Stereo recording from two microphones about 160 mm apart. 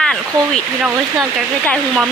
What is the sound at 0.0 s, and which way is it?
Speech, 5° left (ahead or behind).